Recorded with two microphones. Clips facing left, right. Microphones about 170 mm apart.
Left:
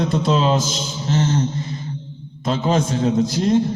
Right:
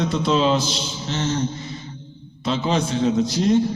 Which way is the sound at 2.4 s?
45° left (ahead or behind).